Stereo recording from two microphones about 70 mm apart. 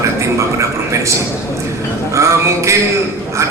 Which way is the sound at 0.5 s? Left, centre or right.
Right.